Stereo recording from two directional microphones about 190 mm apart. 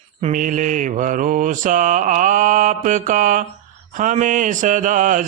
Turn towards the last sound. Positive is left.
turn(degrees=-45)  # may be behind; listen again after turning